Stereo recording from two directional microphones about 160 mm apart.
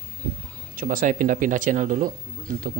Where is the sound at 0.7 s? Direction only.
60° right (ahead or behind).